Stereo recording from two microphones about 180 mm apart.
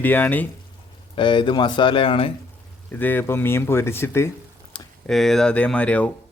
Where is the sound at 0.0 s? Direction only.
10° left (ahead or behind).